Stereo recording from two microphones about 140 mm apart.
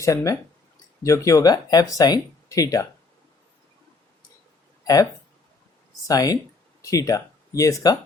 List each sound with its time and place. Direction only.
0.0 s speech: 25° left (ahead or behind)
6.1 s speech: 25° left (ahead or behind)